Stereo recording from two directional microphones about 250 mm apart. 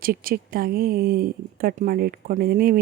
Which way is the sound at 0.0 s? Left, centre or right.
Right.